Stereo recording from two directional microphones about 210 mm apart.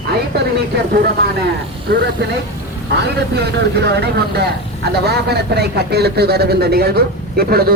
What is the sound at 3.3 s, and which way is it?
A man's voice, 50° right (ahead or behind).